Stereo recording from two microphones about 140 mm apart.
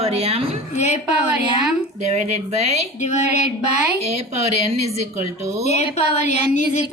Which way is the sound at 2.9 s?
55° left (ahead or behind).